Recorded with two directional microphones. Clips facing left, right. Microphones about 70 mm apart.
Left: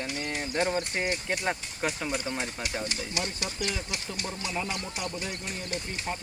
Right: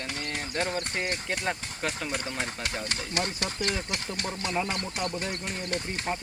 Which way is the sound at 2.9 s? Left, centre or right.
Right.